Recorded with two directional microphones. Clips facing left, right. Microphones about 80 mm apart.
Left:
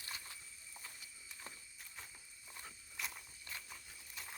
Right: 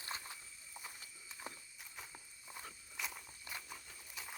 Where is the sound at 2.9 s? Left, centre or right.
Centre.